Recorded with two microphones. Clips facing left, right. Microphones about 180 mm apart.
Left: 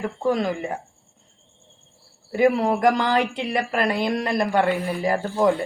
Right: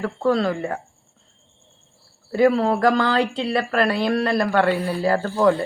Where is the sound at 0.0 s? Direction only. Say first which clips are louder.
Right 2 dB; 15° left (ahead or behind).